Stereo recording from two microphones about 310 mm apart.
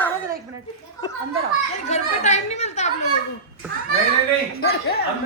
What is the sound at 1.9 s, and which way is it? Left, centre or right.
A child's voice, left.